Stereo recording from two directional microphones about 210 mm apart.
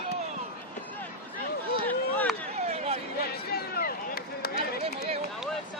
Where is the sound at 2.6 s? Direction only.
30° right (ahead or behind).